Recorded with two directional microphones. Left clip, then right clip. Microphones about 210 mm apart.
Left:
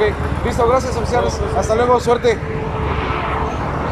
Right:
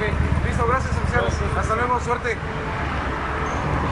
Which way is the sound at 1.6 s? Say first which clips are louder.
Left 8 dB; 25° left (ahead or behind).